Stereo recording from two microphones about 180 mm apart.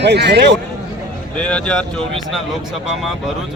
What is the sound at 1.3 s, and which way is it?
Speech, 5° left (ahead or behind).